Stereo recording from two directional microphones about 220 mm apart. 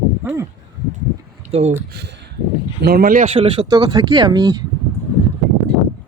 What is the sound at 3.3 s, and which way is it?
Speech, 25° right (ahead or behind).